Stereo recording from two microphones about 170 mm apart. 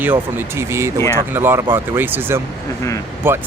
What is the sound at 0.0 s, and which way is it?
Speech, 10° right (ahead or behind).